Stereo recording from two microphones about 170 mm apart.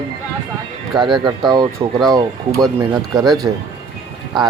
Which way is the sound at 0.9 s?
25° right (ahead or behind).